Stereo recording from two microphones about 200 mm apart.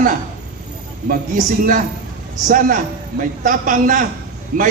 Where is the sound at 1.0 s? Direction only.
45° right (ahead or behind).